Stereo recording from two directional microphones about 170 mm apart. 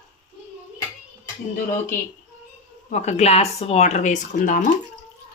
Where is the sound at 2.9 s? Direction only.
40° left (ahead or behind).